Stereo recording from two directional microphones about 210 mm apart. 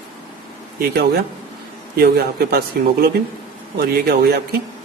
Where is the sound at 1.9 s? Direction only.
50° right (ahead or behind).